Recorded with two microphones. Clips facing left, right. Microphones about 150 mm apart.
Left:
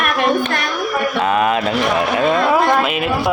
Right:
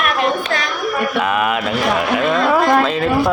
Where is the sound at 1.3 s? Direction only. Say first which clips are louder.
Left 2 dB; 30° left (ahead or behind).